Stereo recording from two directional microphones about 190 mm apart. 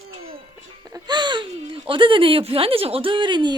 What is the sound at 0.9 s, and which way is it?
Speech, 20° right (ahead or behind).